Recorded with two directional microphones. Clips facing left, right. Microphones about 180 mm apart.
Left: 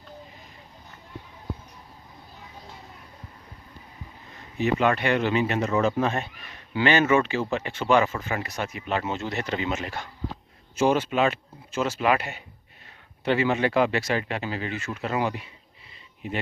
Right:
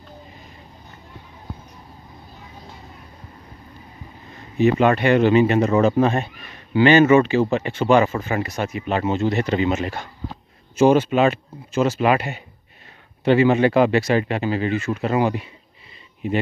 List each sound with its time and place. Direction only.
4.7 s speech: 35° right (ahead or behind)
12.1 s speech: 15° right (ahead or behind)
13.5 s speech: 35° right (ahead or behind)